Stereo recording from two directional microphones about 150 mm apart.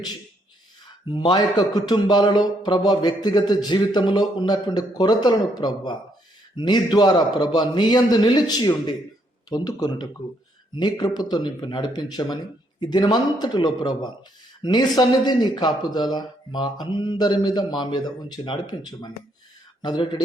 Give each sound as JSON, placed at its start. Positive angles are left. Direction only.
{"t": 1.1, "sound": "a man's voice", "side_deg": 30}